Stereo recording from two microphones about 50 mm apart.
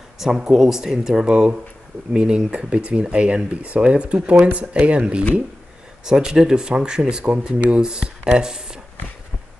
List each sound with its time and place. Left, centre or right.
0.2 s speech: centre
1.2 s speech: right